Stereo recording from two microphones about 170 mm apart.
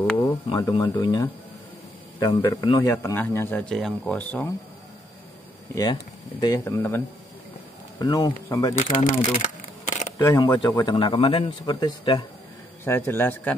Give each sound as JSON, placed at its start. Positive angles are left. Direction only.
{"t": 0.2, "sound": "speech", "side_deg": 20}
{"t": 3.0, "sound": "speech", "side_deg": 15}
{"t": 6.4, "sound": "speech", "side_deg": 20}
{"t": 8.0, "sound": "speech", "side_deg": 25}
{"t": 8.7, "sound": "speech", "side_deg": 50}
{"t": 9.4, "sound": "camera", "side_deg": 45}
{"t": 10.1, "sound": "speech", "side_deg": 15}
{"t": 12.8, "sound": "speech", "side_deg": 15}